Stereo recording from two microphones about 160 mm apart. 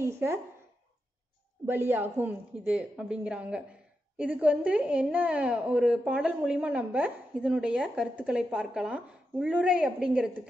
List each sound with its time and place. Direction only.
0.0 s a woman's voice: 15° right (ahead or behind)
1.7 s a woman's voice: 10° right (ahead or behind)